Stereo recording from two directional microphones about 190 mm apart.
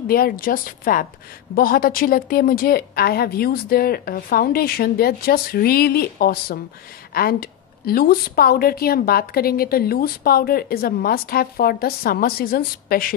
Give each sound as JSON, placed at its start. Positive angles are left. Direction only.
{"t": 0.1, "sound": "a woman's voice", "side_deg": 50}